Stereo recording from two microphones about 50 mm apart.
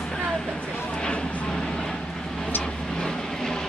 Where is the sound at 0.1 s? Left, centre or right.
Centre.